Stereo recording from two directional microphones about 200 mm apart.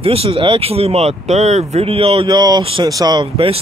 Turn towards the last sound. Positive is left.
turn(degrees=-25)  # may be behind; listen again after turning